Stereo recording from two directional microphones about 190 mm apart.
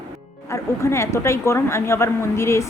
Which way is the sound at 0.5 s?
15° left (ahead or behind).